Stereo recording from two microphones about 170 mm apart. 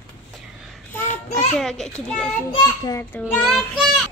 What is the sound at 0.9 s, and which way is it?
A child's voice, 10° left (ahead or behind).